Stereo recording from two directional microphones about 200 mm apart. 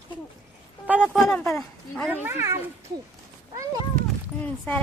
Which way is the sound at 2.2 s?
15° right (ahead or behind).